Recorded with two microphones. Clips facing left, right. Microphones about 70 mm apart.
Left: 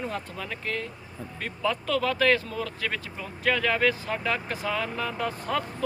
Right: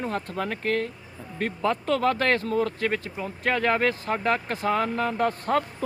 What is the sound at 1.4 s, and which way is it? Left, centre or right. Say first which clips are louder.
Speech: right 3 dB; right.